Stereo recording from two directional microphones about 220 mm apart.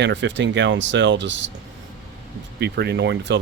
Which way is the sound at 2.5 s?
50° right (ahead or behind).